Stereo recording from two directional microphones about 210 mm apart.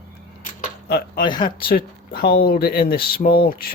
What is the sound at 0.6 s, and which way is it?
Keys jangling, 45° left (ahead or behind).